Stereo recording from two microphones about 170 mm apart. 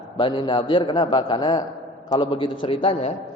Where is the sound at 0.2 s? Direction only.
25° left (ahead or behind).